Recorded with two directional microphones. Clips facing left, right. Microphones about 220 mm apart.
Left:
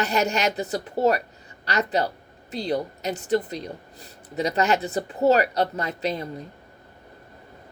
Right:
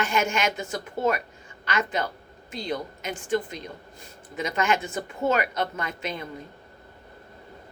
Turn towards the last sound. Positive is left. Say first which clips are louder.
# left 5 dB
turn(degrees=35)  # may be behind; listen again after turning